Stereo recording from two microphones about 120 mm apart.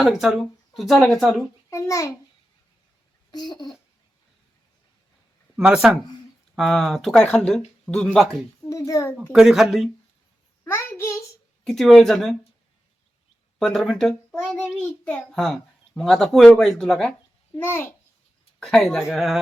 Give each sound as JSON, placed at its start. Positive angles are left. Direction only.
{"t": 0.0, "sound": "a child's voice", "side_deg": -5}
{"t": 1.7, "sound": "a child's voice", "side_deg": 25}
{"t": 3.3, "sound": "a child's voice", "side_deg": 35}
{"t": 5.5, "sound": "a child's voice", "side_deg": -5}
{"t": 8.7, "sound": "a child's voice", "side_deg": 25}
{"t": 9.3, "sound": "a child's voice", "side_deg": -5}
{"t": 10.6, "sound": "a sound", "side_deg": 20}
{"t": 11.6, "sound": "a child's voice", "side_deg": 5}
{"t": 13.6, "sound": "a child's voice", "side_deg": 0}
{"t": 17.6, "sound": "a child's voice", "side_deg": 20}
{"t": 18.6, "sound": "a child's voice", "side_deg": 5}